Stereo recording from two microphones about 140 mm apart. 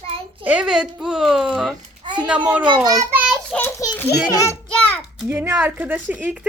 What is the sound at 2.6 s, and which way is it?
Speech, 30° right (ahead or behind).